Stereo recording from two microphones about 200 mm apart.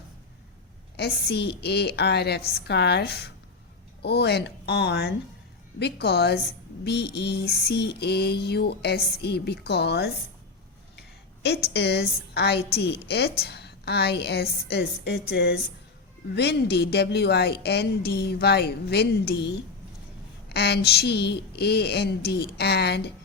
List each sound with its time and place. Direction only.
0.9 s a woman's voice: 55° left (ahead or behind)
11.4 s a woman's voice: 55° left (ahead or behind)
20.5 s a woman's voice: 55° left (ahead or behind)